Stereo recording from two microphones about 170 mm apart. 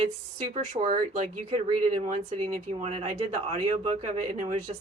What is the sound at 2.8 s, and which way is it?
Speech, 35° right (ahead or behind).